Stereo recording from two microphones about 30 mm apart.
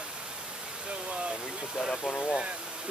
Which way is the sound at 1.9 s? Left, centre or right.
Centre.